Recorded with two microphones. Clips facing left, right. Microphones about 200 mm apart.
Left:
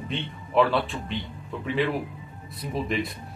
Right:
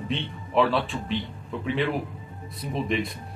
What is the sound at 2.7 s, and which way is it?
Speech, centre (ahead or behind).